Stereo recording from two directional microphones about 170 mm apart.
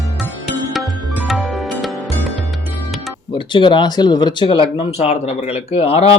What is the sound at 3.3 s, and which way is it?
Speech, 30° left (ahead or behind).